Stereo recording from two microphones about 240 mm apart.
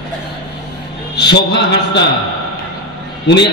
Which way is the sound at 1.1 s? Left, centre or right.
Left.